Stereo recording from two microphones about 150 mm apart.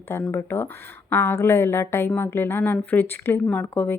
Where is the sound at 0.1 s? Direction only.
15° left (ahead or behind).